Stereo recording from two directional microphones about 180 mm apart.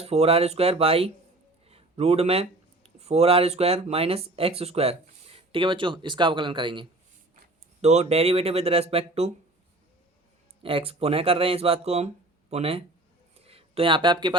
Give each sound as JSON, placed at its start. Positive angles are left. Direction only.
{"t": 0.0, "sound": "speech", "side_deg": -35}
{"t": 7.8, "sound": "speech", "side_deg": -40}
{"t": 10.6, "sound": "speech", "side_deg": -30}
{"t": 13.3, "sound": "a sound", "side_deg": -35}